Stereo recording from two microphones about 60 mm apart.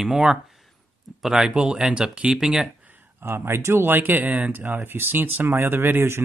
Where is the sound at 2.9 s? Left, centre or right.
Right.